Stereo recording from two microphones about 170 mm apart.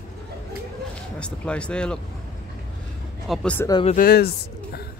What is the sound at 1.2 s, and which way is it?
Speech, 5° left (ahead or behind).